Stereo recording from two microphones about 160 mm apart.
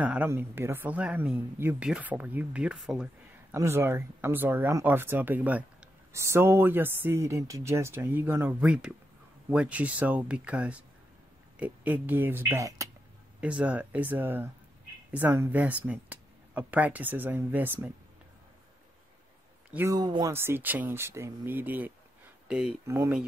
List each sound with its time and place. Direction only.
0.0 s speech: 10° right (ahead or behind)
3.5 s speech: 15° right (ahead or behind)
13.4 s speech: 10° right (ahead or behind)
19.7 s speech: 15° right (ahead or behind)
20.0 s speech: 25° right (ahead or behind); by 22.8 s 5° right (ahead or behind)
22.8 s speech: 15° right (ahead or behind)